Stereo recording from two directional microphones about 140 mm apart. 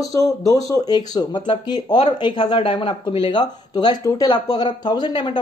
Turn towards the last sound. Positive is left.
turn(degrees=30)  # may be behind; listen again after turning